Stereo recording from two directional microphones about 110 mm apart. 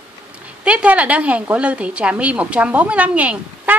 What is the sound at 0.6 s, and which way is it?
A woman's voice, 10° right (ahead or behind).